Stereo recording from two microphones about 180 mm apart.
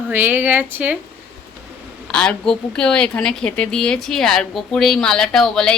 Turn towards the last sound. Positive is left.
turn(degrees=5)  # may be behind; listen again after turning